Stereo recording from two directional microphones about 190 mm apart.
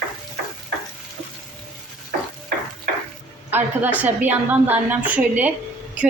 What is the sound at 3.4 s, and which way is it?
A woman's voice, 10° right (ahead or behind).